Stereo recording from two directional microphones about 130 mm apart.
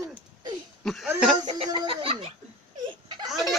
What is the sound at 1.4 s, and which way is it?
Speech, 50° right (ahead or behind).